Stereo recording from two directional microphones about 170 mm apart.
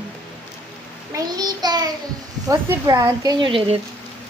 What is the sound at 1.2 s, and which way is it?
Child singing, 25° right (ahead or behind).